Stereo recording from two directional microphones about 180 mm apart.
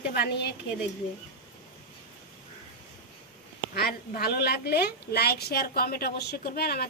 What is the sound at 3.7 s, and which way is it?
A woman's voice, 60° left (ahead or behind).